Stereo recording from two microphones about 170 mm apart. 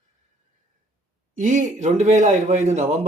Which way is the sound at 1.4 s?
50° right (ahead or behind).